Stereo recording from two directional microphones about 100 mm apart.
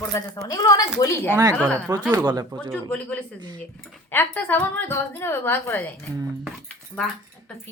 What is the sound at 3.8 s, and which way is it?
Speech, 15° left (ahead or behind).